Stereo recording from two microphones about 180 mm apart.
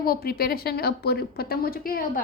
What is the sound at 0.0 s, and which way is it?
A woman's voice, 55° left (ahead or behind).